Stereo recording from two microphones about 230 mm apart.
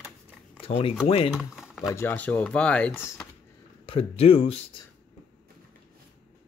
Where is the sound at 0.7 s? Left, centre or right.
Left.